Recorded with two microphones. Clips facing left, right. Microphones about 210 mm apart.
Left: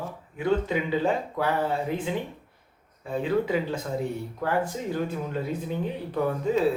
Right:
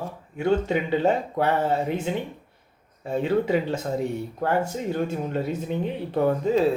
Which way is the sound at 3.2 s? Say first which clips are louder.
Right 2 dB; 25° right (ahead or behind).